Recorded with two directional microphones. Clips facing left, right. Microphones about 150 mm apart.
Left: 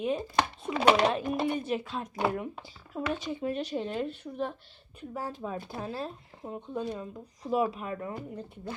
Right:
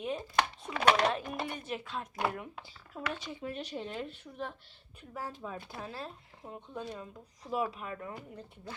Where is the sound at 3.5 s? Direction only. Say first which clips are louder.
Left 6 dB; 80° left.